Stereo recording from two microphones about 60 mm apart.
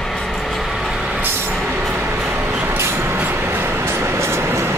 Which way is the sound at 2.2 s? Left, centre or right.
Centre.